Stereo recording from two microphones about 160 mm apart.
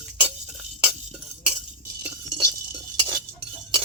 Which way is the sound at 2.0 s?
20° right (ahead or behind).